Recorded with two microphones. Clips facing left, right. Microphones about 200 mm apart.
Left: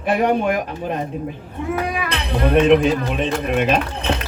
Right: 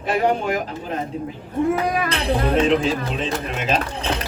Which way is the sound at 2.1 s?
60° left (ahead or behind).